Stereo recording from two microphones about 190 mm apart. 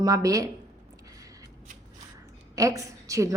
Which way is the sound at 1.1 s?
20° right (ahead or behind).